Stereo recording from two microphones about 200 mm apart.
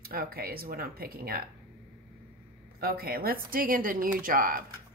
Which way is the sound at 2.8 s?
50° right (ahead or behind).